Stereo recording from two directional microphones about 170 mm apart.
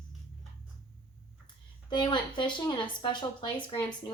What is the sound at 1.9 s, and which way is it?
A woman's voice, 25° left (ahead or behind).